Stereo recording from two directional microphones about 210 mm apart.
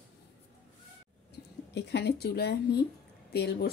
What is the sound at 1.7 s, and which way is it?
A woman's voice, 55° left (ahead or behind).